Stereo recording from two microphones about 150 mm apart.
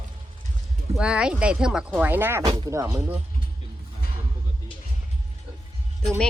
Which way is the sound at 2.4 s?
35° right (ahead or behind).